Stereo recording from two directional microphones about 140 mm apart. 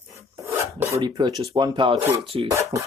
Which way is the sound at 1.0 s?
30° right (ahead or behind).